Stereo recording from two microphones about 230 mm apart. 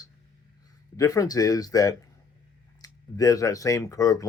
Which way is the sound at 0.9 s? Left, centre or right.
Centre.